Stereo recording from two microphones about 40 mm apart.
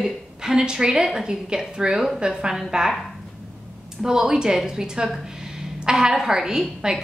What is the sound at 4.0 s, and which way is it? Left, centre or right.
A woman's voice, centre.